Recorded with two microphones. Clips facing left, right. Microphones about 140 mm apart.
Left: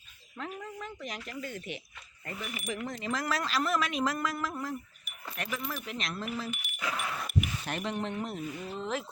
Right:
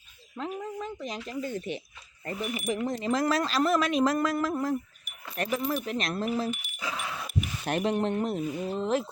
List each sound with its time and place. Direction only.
0.3 s speech: 25° right (ahead or behind)
5.8 s speech: 45° right (ahead or behind)
6.5 s dog: centre (ahead or behind)
7.6 s speech: 45° right (ahead or behind)